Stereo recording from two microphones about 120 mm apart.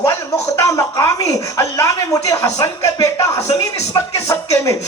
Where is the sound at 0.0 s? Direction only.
25° left (ahead or behind).